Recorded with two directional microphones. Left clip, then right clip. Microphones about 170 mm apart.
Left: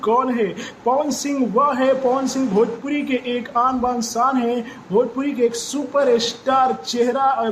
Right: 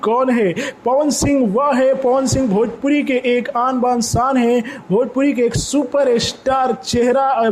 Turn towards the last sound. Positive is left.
turn(degrees=-40)  # may be behind; listen again after turning